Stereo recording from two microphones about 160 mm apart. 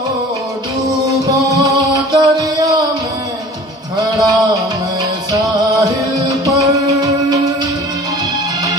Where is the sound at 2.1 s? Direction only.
20° right (ahead or behind).